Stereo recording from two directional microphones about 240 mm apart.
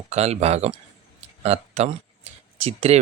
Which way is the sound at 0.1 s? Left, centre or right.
Right.